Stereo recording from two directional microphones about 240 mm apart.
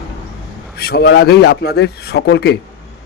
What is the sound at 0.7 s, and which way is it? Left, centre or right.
A man's voice, left.